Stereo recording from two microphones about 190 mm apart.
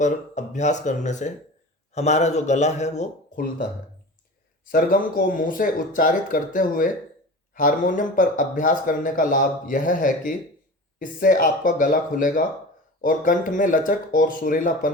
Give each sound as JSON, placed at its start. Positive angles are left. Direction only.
{"t": 0.0, "sound": "a man's voice", "side_deg": 40}
{"t": 4.7, "sound": "speech", "side_deg": 50}